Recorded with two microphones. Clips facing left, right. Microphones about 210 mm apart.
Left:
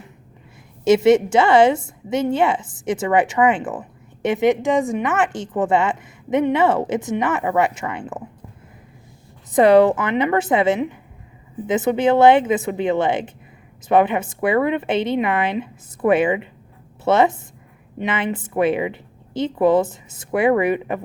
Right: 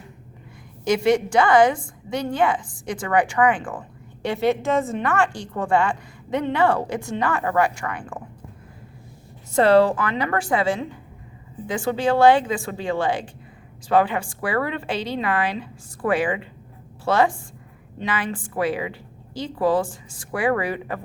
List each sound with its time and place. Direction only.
0.9 s a woman's voice: 25° left (ahead or behind)
9.5 s a woman's voice: 15° left (ahead or behind)